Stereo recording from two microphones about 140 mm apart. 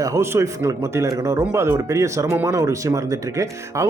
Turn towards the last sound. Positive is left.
turn(degrees=-20)  # may be behind; listen again after turning